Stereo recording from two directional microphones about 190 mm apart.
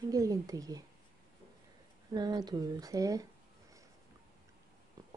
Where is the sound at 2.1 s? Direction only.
20° right (ahead or behind).